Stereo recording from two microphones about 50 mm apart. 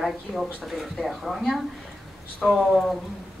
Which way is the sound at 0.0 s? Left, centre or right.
Centre.